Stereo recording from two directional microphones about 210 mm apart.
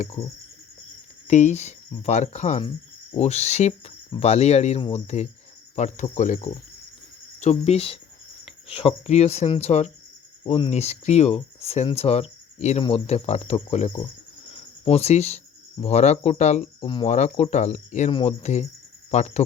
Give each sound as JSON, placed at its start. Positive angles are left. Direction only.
{"t": 1.3, "sound": "speech", "side_deg": 35}